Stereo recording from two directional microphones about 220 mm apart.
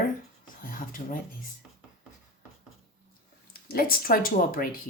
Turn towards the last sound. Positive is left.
turn(degrees=40)  # may be behind; listen again after turning